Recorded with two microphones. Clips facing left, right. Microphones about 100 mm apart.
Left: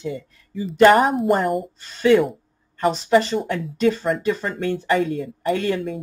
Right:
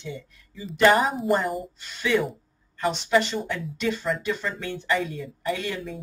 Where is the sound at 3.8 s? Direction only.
40° left (ahead or behind).